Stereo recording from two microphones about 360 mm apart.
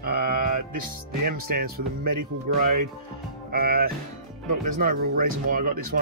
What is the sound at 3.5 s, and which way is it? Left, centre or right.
Speech, right.